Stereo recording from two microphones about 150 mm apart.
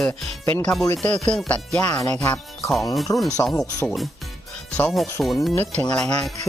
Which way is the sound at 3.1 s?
25° left (ahead or behind).